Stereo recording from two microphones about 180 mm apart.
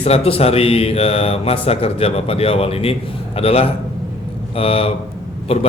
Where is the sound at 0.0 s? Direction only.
35° left (ahead or behind).